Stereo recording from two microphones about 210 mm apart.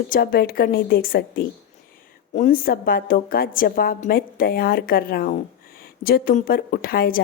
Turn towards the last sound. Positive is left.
turn(degrees=45)  # may be behind; listen again after turning